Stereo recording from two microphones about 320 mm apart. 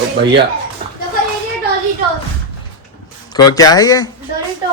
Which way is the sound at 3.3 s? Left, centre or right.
Centre.